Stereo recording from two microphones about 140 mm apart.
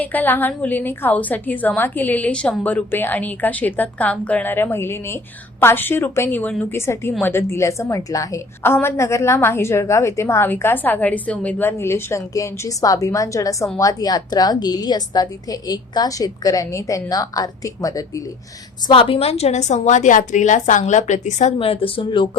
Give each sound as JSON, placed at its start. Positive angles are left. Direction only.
{"t": 0.0, "sound": "a woman's voice", "side_deg": 10}
{"t": 18.9, "sound": "a woman's voice", "side_deg": 40}